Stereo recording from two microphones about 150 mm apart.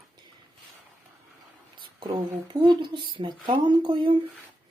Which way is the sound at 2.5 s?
35° right (ahead or behind).